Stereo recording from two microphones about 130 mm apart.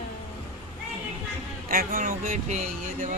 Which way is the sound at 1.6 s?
90° right.